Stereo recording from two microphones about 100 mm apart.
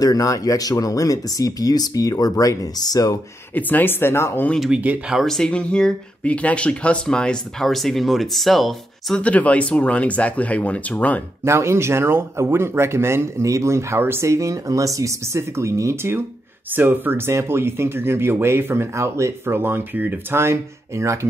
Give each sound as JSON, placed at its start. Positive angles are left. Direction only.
{"t": 0.0, "sound": "speech", "side_deg": 35}
{"t": 3.5, "sound": "speech", "side_deg": 20}
{"t": 4.6, "sound": "speech", "side_deg": -10}
{"t": 5.2, "sound": "speech", "side_deg": 5}
{"t": 9.2, "sound": "speech", "side_deg": 15}
{"t": 11.4, "sound": "speech", "side_deg": -25}